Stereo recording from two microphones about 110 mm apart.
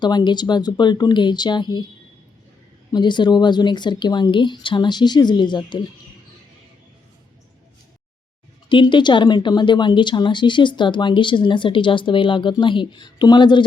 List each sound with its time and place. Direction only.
0.0 s speech: 40° left (ahead or behind)
2.9 s a woman's voice: 45° left (ahead or behind)
8.7 s a woman's voice: 45° left (ahead or behind)